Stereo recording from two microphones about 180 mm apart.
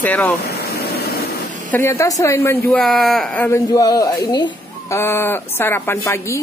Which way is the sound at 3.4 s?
15° left (ahead or behind).